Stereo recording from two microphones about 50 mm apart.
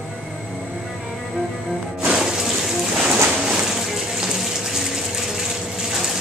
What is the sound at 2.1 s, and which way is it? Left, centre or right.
Music, centre.